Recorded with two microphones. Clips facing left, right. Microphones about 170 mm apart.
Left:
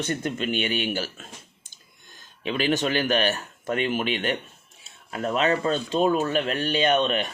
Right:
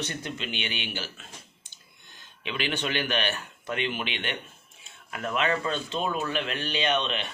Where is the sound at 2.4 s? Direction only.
40° left (ahead or behind).